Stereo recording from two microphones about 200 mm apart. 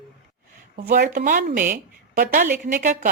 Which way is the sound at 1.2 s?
45° right (ahead or behind).